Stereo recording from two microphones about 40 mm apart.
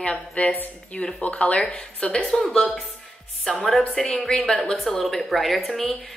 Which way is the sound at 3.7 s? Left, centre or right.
Centre.